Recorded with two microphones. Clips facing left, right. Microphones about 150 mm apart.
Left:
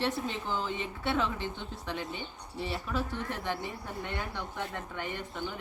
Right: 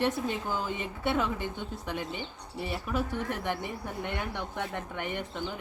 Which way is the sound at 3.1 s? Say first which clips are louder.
Right 3 dB; 50° right (ahead or behind).